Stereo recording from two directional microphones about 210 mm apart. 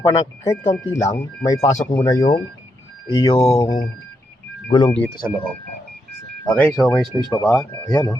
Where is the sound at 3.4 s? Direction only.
10° left (ahead or behind).